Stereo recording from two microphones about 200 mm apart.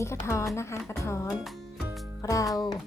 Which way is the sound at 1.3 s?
Centre (ahead or behind).